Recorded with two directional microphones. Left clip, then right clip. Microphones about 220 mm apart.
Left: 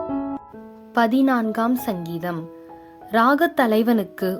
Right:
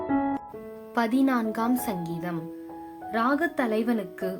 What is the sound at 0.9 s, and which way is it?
Speech, 30° left (ahead or behind).